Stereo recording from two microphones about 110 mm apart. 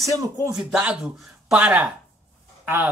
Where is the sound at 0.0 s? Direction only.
30° right (ahead or behind).